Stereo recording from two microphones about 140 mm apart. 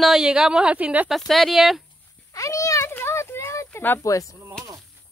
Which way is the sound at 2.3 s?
25° left (ahead or behind).